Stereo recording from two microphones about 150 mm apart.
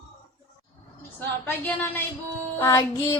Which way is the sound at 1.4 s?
15° left (ahead or behind).